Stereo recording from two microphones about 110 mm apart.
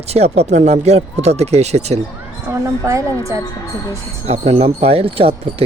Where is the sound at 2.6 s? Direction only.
30° right (ahead or behind).